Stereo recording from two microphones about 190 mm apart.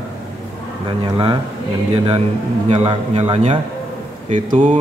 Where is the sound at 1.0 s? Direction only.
25° right (ahead or behind).